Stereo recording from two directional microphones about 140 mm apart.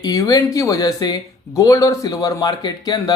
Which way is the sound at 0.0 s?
25° left (ahead or behind).